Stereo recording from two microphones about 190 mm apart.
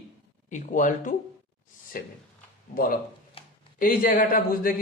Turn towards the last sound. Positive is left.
turn(degrees=50)  # may be behind; listen again after turning